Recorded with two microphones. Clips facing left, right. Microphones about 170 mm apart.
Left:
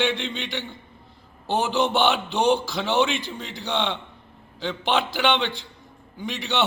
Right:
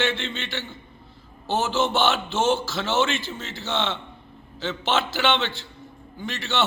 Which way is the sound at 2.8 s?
15° left (ahead or behind).